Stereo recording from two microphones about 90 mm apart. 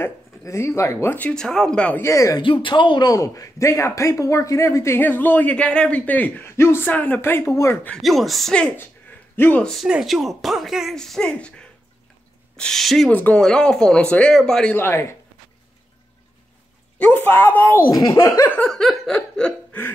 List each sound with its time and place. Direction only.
0.4 s speech: 35° left (ahead or behind)
1.3 s speech: 5° left (ahead or behind)
2.0 s speech: 35° left (ahead or behind)
2.4 s speech: 65° left (ahead or behind)
3.1 s speech: 40° left (ahead or behind)
8.0 s speech: centre (ahead or behind)
9.8 s speech: 5° right (ahead or behind)
11.0 s speech: 5° left (ahead or behind)
13.1 s speech: 15° left (ahead or behind)
14.7 s speech: 25° left (ahead or behind)
17.0 s speech: 20° left (ahead or behind)
17.9 s speech: 40° left (ahead or behind)
18.7 s speech: 5° left (ahead or behind)